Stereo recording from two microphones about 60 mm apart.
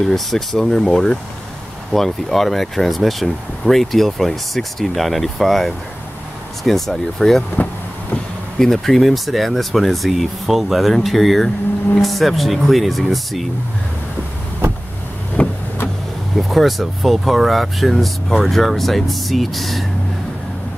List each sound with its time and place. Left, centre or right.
0.0 s speech: centre
8.5 s speech: centre
15.4 s vehicle: left
16.3 s speech: centre